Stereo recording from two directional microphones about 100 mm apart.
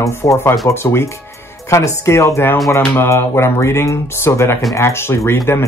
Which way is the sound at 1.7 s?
30° left (ahead or behind).